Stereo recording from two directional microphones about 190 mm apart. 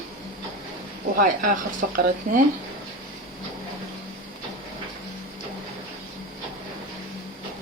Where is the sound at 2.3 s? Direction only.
45° right (ahead or behind).